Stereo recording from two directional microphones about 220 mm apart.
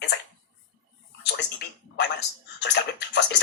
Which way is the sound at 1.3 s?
50° left (ahead or behind).